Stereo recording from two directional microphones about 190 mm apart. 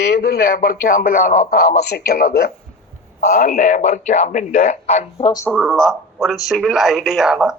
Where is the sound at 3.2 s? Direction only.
45° left (ahead or behind).